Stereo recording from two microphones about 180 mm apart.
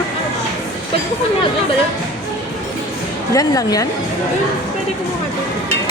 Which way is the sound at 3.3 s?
20° left (ahead or behind).